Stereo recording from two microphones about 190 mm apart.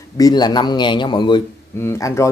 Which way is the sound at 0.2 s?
20° left (ahead or behind).